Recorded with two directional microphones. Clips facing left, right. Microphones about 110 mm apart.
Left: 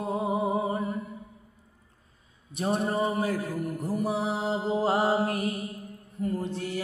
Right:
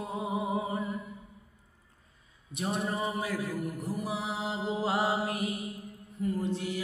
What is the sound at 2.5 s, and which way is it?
Mantra, 35° left (ahead or behind).